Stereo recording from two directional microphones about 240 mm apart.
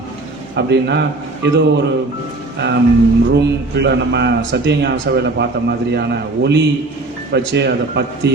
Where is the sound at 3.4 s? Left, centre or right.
Right.